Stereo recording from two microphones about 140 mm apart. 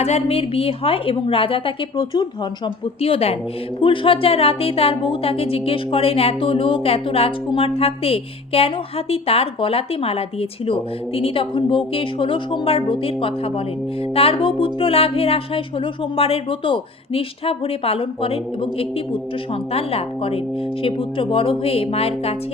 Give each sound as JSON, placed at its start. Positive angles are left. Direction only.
{"t": 0.0, "sound": "a woman's voice", "side_deg": 50}